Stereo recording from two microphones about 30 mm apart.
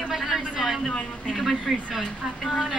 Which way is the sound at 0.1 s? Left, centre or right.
Centre.